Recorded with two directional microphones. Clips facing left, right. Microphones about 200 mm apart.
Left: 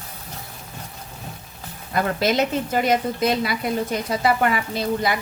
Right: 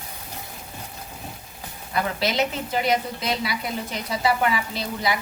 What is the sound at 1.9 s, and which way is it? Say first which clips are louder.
A woman's voice: left 4 dB; 50° left (ahead or behind).